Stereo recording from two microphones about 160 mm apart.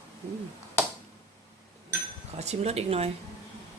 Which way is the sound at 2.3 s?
45° right (ahead or behind).